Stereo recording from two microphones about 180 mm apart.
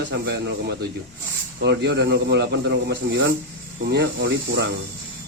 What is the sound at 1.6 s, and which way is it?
Speech, 70° right (ahead or behind).